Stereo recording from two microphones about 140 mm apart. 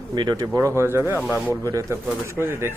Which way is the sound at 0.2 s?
25° right (ahead or behind).